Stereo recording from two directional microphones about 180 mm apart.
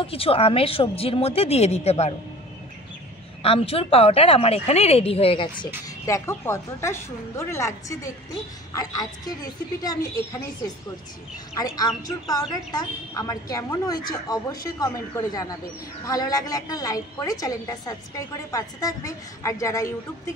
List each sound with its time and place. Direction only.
0.0 s a woman's voice: 30° left (ahead or behind)
3.4 s a woman's voice: 30° left (ahead or behind)
6.0 s a woman's voice: 15° left (ahead or behind)
11.5 s a woman's voice: 20° left (ahead or behind)